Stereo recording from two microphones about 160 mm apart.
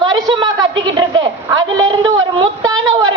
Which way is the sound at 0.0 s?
25° right (ahead or behind).